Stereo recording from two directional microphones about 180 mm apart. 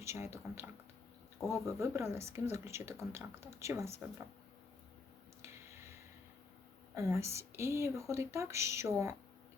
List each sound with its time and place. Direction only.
0.0 s speech: 15° right (ahead or behind)
6.9 s speech: 15° right (ahead or behind)